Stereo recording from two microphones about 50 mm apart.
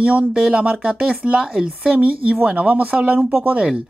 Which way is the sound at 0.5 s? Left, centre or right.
Right.